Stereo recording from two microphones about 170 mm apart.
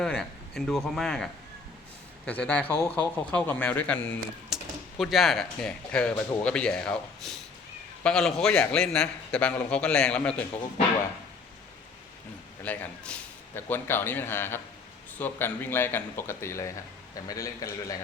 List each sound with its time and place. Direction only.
0.0 s a man's voice: 5° left (ahead or behind)
4.4 s a man's voice: centre (ahead or behind)
12.6 s a man's voice: 10° left (ahead or behind)